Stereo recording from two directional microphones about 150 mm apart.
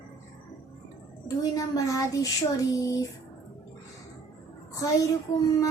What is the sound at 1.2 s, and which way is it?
A woman's voice, 25° left (ahead or behind).